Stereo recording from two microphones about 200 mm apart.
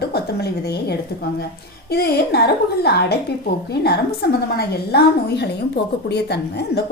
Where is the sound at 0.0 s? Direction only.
55° left (ahead or behind).